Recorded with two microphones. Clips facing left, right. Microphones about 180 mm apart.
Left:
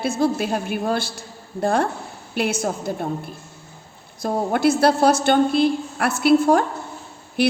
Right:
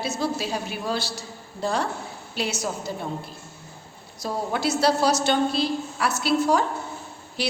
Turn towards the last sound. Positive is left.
turn(degrees=55)  # may be behind; listen again after turning